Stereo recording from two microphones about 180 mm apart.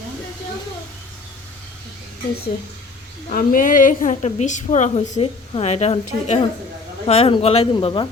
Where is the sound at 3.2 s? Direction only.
50° left (ahead or behind); by 8.0 s 30° left (ahead or behind).